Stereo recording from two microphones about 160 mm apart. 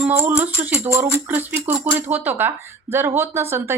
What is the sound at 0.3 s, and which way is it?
Speech, 10° right (ahead or behind).